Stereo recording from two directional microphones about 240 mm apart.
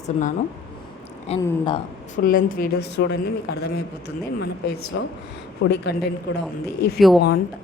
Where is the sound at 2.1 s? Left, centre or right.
Left.